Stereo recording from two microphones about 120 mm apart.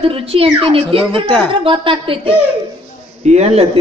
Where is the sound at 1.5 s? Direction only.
45° right (ahead or behind).